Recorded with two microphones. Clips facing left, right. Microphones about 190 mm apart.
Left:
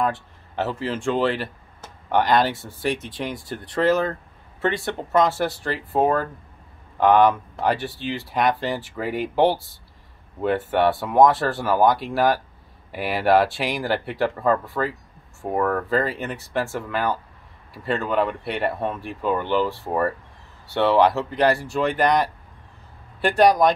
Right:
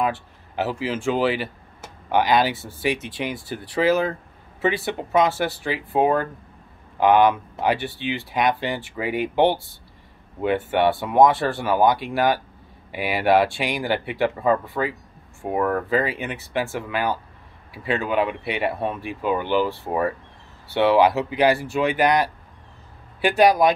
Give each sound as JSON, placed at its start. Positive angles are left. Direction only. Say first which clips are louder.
{"t": 0.0, "sound": "speech", "louder": "even", "side_deg": 0}